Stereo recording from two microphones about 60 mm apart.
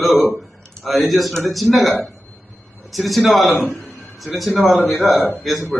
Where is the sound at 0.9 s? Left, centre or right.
Centre.